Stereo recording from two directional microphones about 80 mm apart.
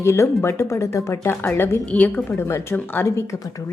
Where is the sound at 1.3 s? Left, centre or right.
Left.